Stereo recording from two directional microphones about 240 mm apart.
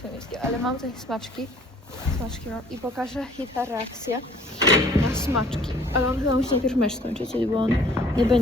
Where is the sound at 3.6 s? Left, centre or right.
Centre.